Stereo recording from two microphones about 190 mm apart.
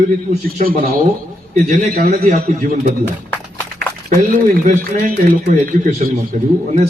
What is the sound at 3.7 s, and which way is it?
Speech, 45° right (ahead or behind).